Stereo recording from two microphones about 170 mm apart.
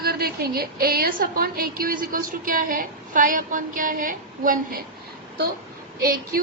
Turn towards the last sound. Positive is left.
turn(degrees=-60)  # may be behind; listen again after turning